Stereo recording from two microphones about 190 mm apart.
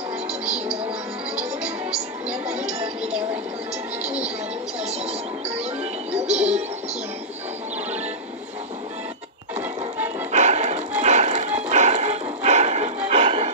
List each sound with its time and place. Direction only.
6.3 s music: 10° right (ahead or behind)
10.3 s music: 40° right (ahead or behind)